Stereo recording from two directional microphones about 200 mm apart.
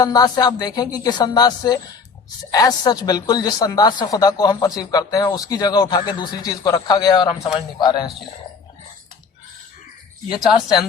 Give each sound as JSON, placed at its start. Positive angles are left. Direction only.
{"t": 0.0, "sound": "speech", "side_deg": 20}